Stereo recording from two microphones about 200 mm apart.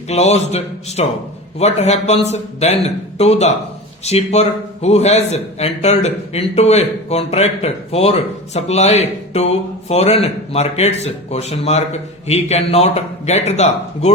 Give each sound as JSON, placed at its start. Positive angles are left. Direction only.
{"t": 0.1, "sound": "a man's voice", "side_deg": 35}